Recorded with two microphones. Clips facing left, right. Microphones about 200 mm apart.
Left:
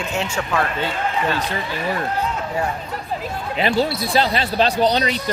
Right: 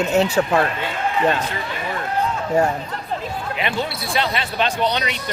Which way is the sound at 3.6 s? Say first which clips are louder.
Left 7 dB; 35° left (ahead or behind).